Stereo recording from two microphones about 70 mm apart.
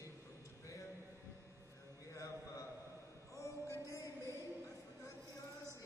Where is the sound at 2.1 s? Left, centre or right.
Left.